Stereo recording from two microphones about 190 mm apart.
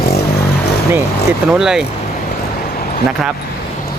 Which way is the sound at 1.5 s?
5° right (ahead or behind).